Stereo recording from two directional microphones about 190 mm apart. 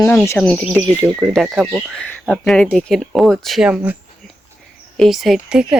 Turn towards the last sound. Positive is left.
turn(degrees=-5)  # may be behind; listen again after turning